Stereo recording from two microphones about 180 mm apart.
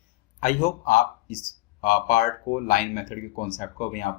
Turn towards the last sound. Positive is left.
turn(degrees=50)  # may be behind; listen again after turning